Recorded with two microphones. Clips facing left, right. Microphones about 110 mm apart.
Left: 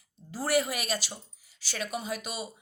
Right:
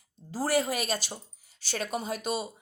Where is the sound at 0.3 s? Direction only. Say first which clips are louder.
Right 1 dB; 40° right (ahead or behind).